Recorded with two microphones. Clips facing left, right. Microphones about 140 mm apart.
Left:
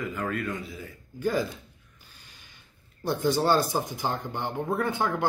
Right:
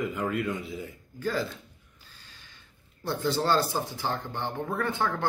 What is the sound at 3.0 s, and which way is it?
Speech, 15° left (ahead or behind).